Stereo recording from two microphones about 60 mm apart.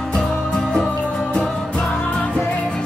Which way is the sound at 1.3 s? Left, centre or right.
Centre.